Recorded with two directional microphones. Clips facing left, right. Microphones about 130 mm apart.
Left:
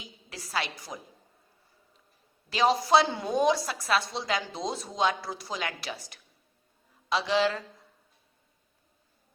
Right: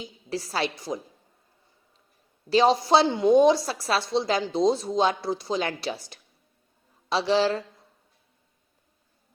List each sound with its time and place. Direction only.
0.0 s a woman's voice: 30° right (ahead or behind)
2.5 s a woman's voice: 30° right (ahead or behind)
7.1 s mantra: 30° right (ahead or behind)